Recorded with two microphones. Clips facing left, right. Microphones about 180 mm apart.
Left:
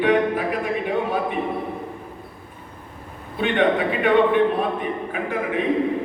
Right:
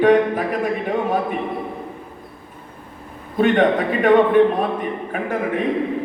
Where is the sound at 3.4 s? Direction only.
45° right (ahead or behind).